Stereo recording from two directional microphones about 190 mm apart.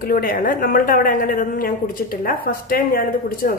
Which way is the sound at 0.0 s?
50° left (ahead or behind).